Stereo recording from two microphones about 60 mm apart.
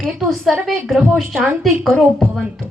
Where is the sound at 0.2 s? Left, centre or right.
Centre.